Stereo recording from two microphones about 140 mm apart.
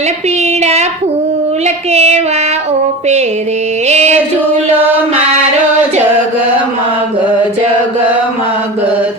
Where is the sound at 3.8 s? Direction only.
55° right (ahead or behind).